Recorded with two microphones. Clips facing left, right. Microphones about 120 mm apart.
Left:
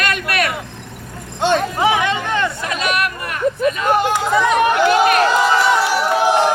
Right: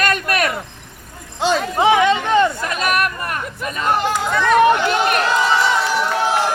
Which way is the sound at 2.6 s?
45° right (ahead or behind).